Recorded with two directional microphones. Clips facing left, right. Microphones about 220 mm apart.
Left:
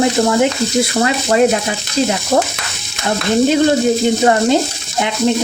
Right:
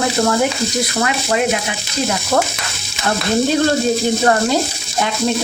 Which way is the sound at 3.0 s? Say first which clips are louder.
Left 3 dB; 20° left (ahead or behind).